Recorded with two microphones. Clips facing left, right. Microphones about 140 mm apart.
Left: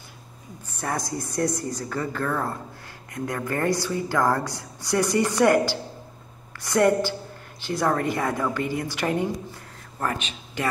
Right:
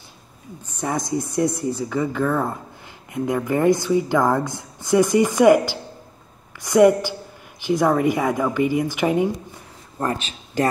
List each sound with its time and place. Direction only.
0.7 s speech: 15° right (ahead or behind)
1.6 s a woman's voice: 10° right (ahead or behind)
9.9 s speech: 35° right (ahead or behind)